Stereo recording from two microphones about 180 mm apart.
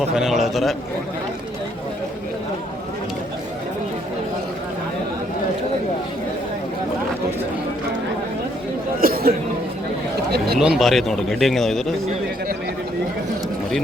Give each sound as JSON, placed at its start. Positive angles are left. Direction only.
{"t": 0.2, "sound": "speech", "side_deg": 0}
{"t": 9.0, "sound": "speech", "side_deg": -55}
{"t": 10.4, "sound": "speech", "side_deg": 0}